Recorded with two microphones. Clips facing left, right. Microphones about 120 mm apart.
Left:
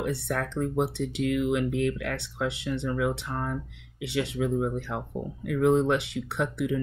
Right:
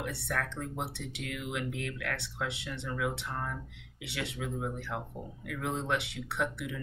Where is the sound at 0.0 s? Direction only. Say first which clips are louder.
Left 6 dB; 25° left (ahead or behind).